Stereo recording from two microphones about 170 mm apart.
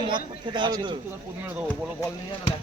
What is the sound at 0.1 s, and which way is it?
Speech, 25° right (ahead or behind).